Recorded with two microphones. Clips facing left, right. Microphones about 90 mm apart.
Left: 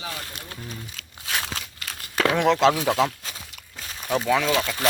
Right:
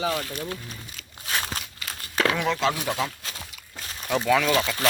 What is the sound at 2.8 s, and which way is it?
Speech, 90° left.